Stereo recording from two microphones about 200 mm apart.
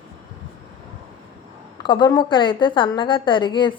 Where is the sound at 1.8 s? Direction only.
25° left (ahead or behind).